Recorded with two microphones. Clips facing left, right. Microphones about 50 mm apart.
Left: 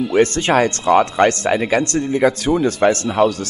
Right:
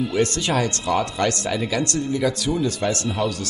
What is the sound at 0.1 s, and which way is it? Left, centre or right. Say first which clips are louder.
Speech: left 7 dB; left.